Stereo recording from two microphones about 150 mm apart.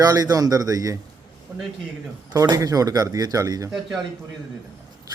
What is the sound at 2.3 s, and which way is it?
Speech, 20° right (ahead or behind).